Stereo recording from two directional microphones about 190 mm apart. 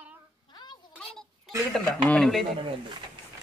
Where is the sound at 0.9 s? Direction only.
Centre (ahead or behind).